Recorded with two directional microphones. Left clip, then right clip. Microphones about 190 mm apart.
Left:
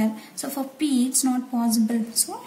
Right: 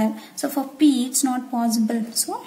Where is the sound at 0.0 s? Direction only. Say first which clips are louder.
Right 4 dB; 45° right (ahead or behind).